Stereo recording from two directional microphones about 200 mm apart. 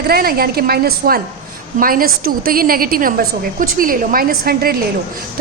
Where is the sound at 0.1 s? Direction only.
50° right (ahead or behind).